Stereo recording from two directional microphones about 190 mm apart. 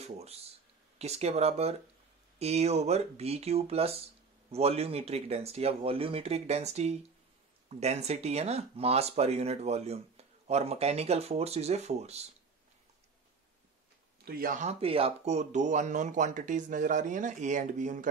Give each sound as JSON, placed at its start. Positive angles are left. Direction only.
{"t": 0.0, "sound": "speech", "side_deg": -35}
{"t": 14.2, "sound": "speech", "side_deg": -50}